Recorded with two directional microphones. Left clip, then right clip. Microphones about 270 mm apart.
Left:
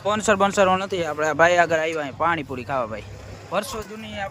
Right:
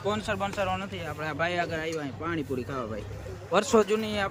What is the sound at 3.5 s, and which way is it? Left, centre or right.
Speech, centre.